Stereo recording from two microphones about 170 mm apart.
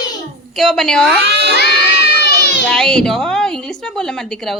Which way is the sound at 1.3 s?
75° right (ahead or behind).